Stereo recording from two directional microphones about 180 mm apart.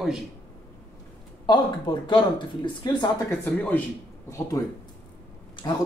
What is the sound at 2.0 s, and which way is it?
Speech, 25° left (ahead or behind).